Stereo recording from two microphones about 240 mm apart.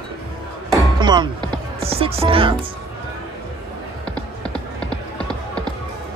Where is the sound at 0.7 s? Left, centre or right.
Centre.